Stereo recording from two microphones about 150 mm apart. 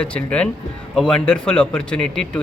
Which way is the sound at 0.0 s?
10° left (ahead or behind).